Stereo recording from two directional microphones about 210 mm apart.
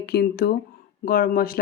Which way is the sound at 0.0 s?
50° left (ahead or behind).